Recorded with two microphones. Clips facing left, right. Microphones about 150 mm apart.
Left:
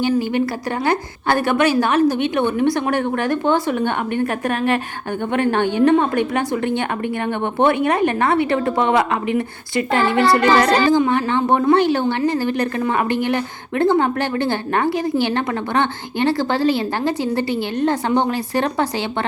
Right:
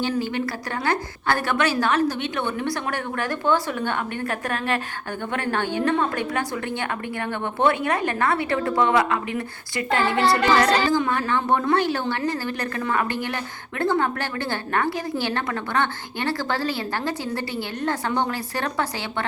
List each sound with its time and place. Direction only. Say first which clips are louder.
0.0 s a woman's voice: left 6 dB; 15° left (ahead or behind)